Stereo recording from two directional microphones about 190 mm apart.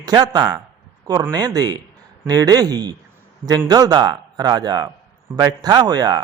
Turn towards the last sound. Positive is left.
turn(degrees=-20)  # may be behind; listen again after turning